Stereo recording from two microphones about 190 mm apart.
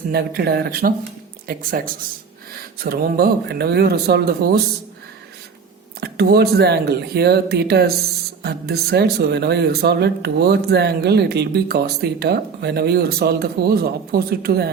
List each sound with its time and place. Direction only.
0.1 s speech: 55° right (ahead or behind)
2.8 s speech: 55° right (ahead or behind)
6.0 s speech: 55° right (ahead or behind)